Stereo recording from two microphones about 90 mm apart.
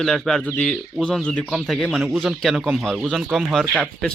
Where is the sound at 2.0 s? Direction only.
5° right (ahead or behind).